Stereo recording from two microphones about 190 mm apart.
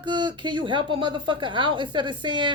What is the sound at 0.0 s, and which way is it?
Speech, 25° right (ahead or behind).